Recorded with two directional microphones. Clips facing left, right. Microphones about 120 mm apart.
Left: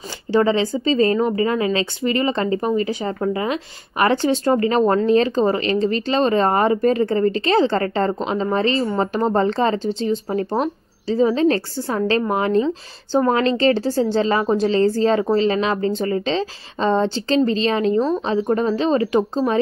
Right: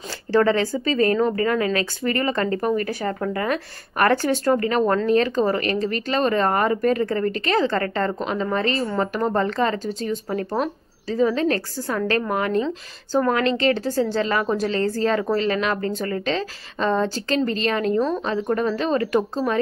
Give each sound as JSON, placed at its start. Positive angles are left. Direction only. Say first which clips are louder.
{"t": 0.3, "sound": "speech", "louder": "left 1 dB", "side_deg": 15}